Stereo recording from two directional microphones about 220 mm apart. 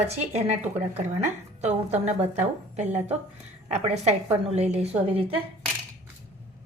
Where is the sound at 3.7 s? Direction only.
30° right (ahead or behind).